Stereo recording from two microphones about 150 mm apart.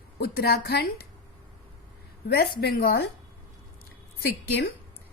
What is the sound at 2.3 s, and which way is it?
Speech, 90° left.